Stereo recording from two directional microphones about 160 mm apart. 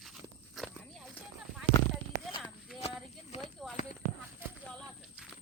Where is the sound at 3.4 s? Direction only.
Centre (ahead or behind).